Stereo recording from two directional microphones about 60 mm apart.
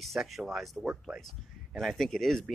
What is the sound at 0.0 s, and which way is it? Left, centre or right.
Speech, centre.